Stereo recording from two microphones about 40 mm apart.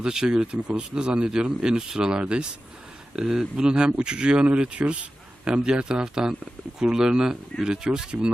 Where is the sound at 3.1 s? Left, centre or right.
Centre.